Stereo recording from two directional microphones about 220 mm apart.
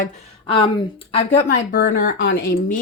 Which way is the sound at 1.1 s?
25° left (ahead or behind).